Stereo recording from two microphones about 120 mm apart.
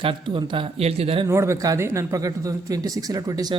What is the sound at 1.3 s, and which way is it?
Speech, 25° right (ahead or behind).